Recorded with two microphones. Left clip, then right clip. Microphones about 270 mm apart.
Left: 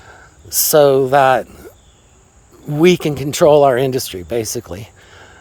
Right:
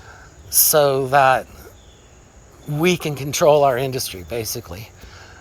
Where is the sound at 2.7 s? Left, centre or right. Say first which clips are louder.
Left 7 dB; left.